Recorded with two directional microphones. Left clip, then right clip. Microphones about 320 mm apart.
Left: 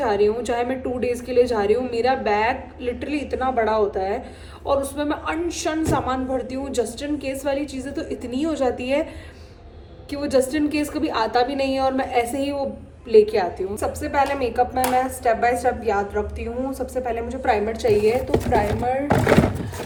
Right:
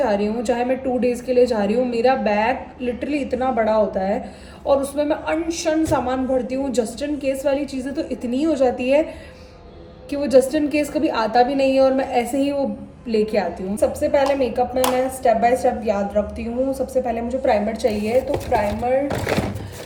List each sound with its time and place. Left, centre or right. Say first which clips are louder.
0.0 s a woman's voice: even; centre
10.1 s a woman's voice: right 5 dB; centre
18.7 s speech: right 1 dB; left